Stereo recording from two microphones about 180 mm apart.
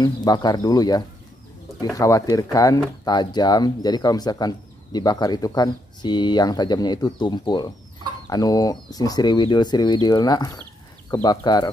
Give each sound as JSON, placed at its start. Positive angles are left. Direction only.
{"t": 0.0, "sound": "speech", "side_deg": 20}